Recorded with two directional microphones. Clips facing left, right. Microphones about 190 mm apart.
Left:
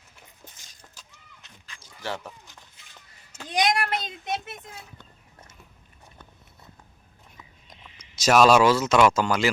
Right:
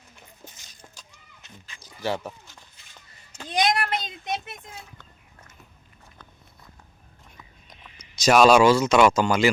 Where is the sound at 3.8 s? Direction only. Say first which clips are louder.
Even; centre (ahead or behind).